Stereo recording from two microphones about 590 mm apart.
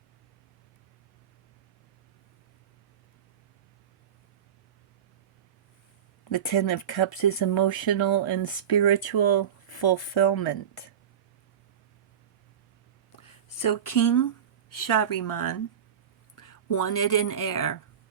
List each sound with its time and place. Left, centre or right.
6.2 s speech: left
13.1 s speech: left